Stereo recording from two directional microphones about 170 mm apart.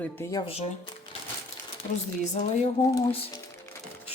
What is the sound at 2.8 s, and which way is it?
Speech, 20° left (ahead or behind).